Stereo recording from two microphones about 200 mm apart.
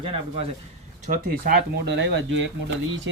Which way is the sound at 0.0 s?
30° right (ahead or behind).